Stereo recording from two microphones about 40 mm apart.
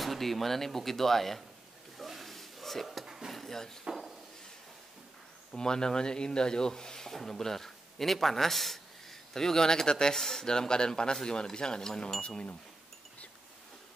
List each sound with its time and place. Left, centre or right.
0.0 s speech: centre
2.0 s a sound: centre
3.3 s dishes: centre
3.8 s speech: centre
5.6 s speech: centre